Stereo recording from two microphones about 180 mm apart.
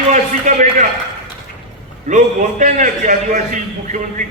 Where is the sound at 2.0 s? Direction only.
45° right (ahead or behind).